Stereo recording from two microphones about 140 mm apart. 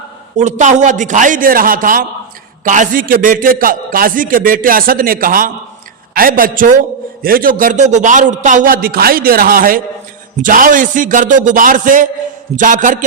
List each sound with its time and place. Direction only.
0.3 s a man's voice: 60° right (ahead or behind); by 2.0 s 80° right
2.6 s a man's voice: 65° right (ahead or behind)
7.2 s a man's voice: 90° right
10.3 s a man's voice: 70° right (ahead or behind)